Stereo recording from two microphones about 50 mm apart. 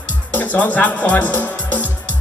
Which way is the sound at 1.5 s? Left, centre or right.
Left.